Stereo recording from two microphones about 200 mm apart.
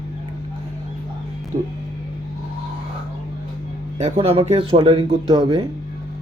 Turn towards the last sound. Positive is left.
turn(degrees=-25)  # may be behind; listen again after turning